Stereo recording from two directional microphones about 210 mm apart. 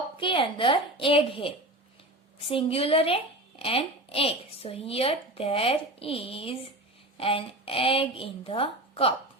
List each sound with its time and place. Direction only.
0.2 s a woman's voice: 25° left (ahead or behind)